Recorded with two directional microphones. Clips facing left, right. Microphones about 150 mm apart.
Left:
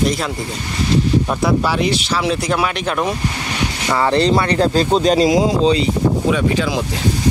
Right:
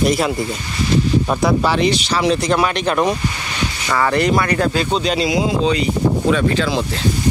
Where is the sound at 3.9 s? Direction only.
25° left (ahead or behind).